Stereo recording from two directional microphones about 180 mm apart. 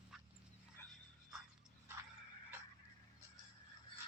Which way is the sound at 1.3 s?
5° right (ahead or behind).